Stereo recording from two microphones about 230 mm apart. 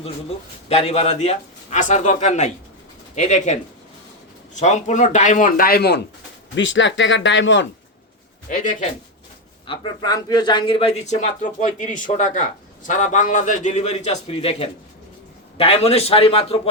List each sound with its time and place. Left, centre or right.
0.7 s a man's voice: left
4.6 s a man's voice: left
6.6 s speech: left
8.4 s a man's voice: left
9.6 s a man's voice: centre